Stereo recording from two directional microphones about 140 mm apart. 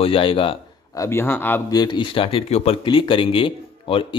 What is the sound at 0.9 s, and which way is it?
Speech, 20° left (ahead or behind).